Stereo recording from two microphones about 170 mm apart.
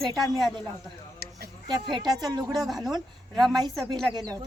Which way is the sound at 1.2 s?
70° right (ahead or behind).